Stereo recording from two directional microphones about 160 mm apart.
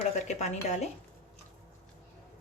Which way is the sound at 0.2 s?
45° left (ahead or behind).